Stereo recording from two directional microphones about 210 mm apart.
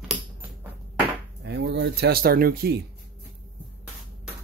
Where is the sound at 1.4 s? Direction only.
55° right (ahead or behind).